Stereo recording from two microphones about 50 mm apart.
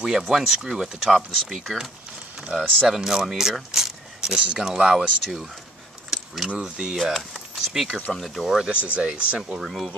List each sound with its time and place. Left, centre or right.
0.2 s speech: centre
1.0 s speech: centre
4.2 s speech: centre
5.2 s speech: centre
6.0 s keys jangling: centre
6.6 s speech: centre
8.8 s speech: right
9.6 s speech: centre